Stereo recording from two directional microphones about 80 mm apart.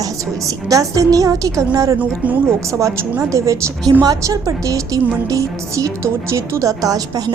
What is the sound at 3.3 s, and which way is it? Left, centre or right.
A woman's voice, right.